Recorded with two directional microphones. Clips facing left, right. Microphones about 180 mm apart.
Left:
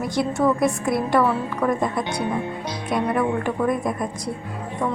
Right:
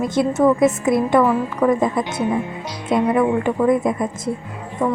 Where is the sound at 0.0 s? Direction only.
20° right (ahead or behind).